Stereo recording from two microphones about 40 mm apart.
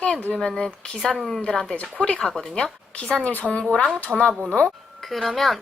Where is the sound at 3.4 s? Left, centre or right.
Left.